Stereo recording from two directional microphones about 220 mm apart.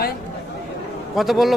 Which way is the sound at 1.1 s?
Centre (ahead or behind).